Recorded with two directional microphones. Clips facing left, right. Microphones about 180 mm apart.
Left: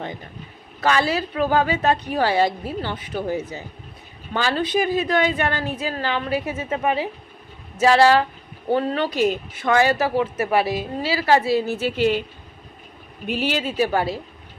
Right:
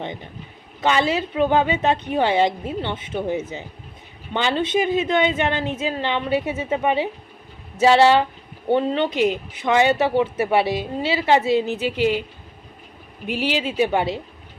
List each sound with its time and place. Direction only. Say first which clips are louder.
0.8 s a woman's voice: right 1 dB; 20° right (ahead or behind)
13.2 s speech: even; 15° right (ahead or behind)